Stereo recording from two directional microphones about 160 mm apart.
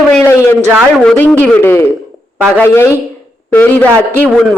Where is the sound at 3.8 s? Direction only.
10° left (ahead or behind).